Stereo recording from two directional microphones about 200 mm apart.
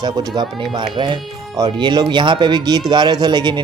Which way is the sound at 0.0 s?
20° right (ahead or behind).